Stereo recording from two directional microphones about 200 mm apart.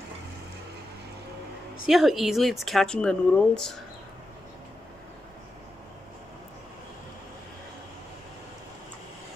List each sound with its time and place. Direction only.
1.9 s speech: centre (ahead or behind)